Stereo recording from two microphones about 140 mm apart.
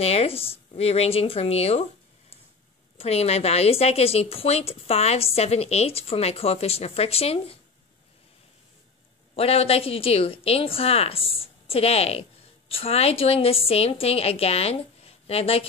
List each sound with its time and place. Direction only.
0.0 s a woman's voice: 45° left (ahead or behind)
9.3 s a woman's voice: 45° left (ahead or behind)